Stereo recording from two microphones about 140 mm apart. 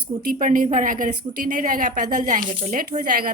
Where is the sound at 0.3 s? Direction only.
70° right (ahead or behind).